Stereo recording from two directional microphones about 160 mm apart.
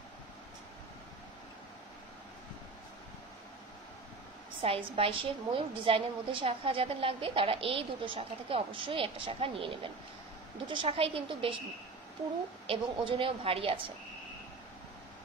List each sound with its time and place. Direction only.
4.6 s a woman's voice: 35° right (ahead or behind)
12.6 s a woman's voice: 35° right (ahead or behind)